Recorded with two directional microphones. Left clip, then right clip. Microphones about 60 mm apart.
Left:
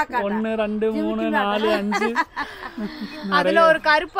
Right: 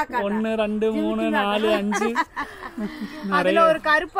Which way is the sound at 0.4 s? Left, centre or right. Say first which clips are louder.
Even; right.